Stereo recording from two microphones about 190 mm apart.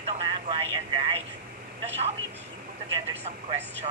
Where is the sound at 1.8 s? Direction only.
35° right (ahead or behind).